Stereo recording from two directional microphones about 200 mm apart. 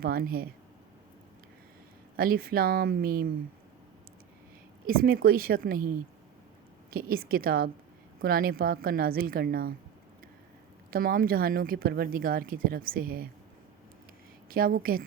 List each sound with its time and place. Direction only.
0.0 s speech: 50° right (ahead or behind)
2.1 s speech: 50° right (ahead or behind)
4.9 s speech: 50° right (ahead or behind)
6.9 s speech: 50° right (ahead or behind)
10.9 s speech: 45° right (ahead or behind)
14.5 s speech: 45° right (ahead or behind)